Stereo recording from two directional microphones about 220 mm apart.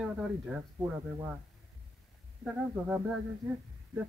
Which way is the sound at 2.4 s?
5° right (ahead or behind).